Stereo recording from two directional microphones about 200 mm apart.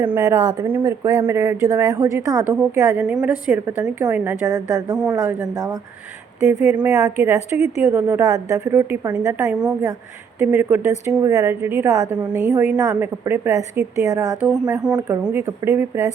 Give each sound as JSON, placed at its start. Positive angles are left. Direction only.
{"t": 0.0, "sound": "a woman's voice", "side_deg": -10}
{"t": 14.7, "sound": "speech", "side_deg": -5}
{"t": 14.9, "sound": "a woman's voice", "side_deg": -15}